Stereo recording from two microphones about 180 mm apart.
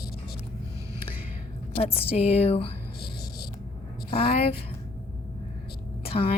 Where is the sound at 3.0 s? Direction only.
60° left (ahead or behind).